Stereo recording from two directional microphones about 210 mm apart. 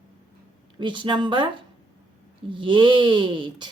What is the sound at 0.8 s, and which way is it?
Speech, 20° right (ahead or behind).